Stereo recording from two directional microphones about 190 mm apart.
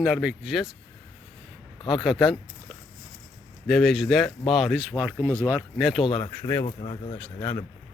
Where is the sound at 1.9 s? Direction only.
5° right (ahead or behind).